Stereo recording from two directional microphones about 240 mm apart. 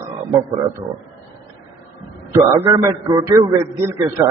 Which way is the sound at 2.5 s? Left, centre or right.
Centre.